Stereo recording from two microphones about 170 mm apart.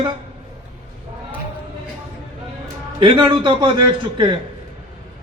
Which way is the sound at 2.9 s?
30° right (ahead or behind).